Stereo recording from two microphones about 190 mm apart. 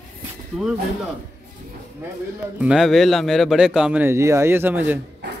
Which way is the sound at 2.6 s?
5° right (ahead or behind).